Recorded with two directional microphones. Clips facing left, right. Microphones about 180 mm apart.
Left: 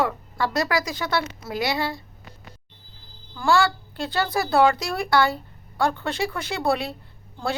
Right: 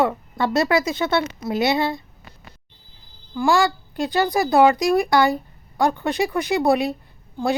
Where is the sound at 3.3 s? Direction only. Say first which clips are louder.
Right 2 dB; 15° right (ahead or behind).